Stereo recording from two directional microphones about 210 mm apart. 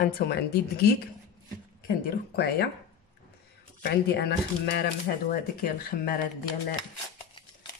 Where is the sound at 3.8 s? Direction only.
50° left (ahead or behind).